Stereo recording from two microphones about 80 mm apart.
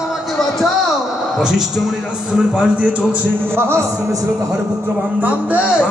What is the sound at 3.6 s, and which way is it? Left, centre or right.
Speech, right.